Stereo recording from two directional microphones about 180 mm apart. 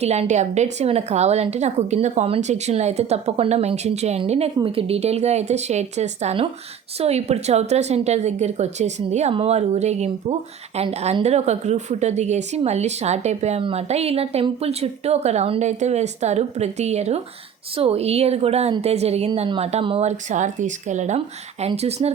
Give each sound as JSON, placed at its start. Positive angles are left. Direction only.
{"t": 0.0, "sound": "a woman's voice", "side_deg": -35}